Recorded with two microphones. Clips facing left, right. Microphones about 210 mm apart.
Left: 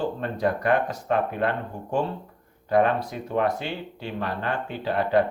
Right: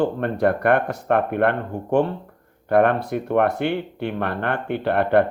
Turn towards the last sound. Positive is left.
turn(degrees=-60)  # may be behind; listen again after turning